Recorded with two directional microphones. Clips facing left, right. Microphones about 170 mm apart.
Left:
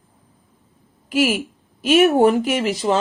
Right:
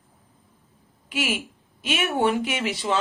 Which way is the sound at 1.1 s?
40° left (ahead or behind).